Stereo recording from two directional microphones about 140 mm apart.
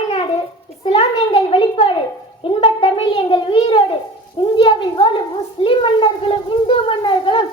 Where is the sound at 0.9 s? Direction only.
40° left (ahead or behind).